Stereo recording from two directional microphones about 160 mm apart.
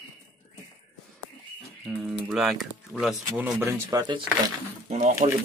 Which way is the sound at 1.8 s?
Centre (ahead or behind).